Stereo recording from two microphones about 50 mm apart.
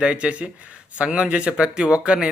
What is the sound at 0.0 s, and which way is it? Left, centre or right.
Speech, right.